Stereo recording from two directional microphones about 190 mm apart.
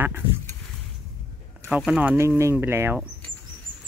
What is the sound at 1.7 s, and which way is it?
Speech, 5° right (ahead or behind).